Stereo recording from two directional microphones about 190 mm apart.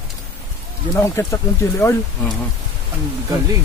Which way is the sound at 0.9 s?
15° left (ahead or behind).